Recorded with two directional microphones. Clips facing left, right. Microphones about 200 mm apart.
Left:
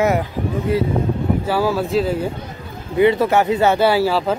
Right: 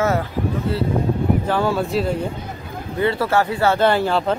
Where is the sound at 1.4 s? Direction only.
5° left (ahead or behind).